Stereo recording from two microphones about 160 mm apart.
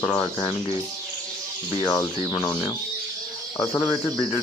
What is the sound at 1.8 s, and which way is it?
Speech, 25° left (ahead or behind).